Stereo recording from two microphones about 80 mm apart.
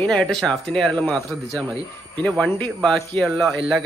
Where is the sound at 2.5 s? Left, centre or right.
Centre.